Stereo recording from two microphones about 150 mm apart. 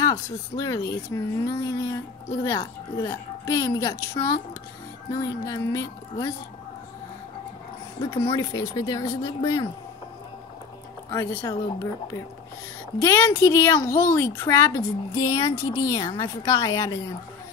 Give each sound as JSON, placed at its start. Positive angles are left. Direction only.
{"t": 0.0, "sound": "speech", "side_deg": 25}
{"t": 8.0, "sound": "speech", "side_deg": 30}
{"t": 11.1, "sound": "speech", "side_deg": 20}